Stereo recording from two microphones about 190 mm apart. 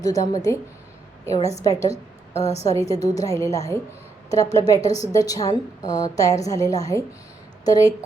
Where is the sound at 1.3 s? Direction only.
35° left (ahead or behind).